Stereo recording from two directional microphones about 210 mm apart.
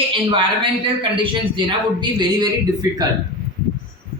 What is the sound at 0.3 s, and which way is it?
A man's voice, 25° right (ahead or behind).